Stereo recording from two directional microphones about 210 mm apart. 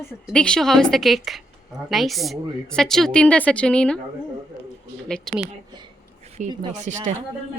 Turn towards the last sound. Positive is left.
turn(degrees=-35)  # may be behind; listen again after turning